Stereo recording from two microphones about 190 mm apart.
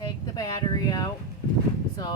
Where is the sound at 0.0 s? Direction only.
20° left (ahead or behind).